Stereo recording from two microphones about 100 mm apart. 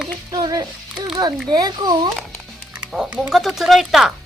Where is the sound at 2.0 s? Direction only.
Centre (ahead or behind).